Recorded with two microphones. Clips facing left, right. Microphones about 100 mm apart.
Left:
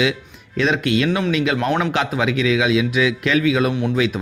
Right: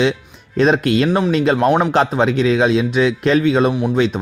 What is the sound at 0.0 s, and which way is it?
Speech, 35° right (ahead or behind).